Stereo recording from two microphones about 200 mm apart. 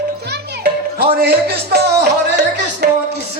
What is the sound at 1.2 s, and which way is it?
Music, 55° right (ahead or behind).